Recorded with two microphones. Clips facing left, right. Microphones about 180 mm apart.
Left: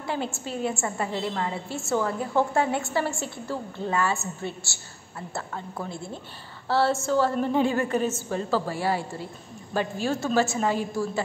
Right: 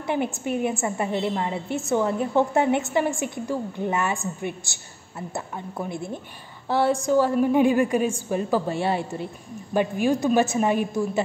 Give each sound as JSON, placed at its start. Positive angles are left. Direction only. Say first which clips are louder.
{"t": 0.0, "sound": "a woman's voice", "louder": "right 5 dB", "side_deg": -20}